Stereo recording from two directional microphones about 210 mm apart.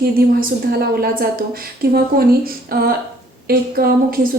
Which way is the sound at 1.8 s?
45° right (ahead or behind).